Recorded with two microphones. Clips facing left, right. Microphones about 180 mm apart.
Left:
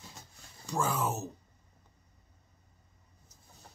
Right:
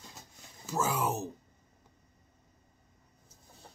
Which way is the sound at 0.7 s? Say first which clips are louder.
Right 1 dB; 5° right (ahead or behind).